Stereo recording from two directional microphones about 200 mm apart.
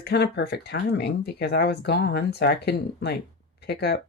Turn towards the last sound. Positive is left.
turn(degrees=55)  # may be behind; listen again after turning